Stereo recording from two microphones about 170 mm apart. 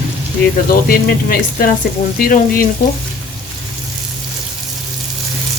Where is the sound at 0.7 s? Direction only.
60° left (ahead or behind).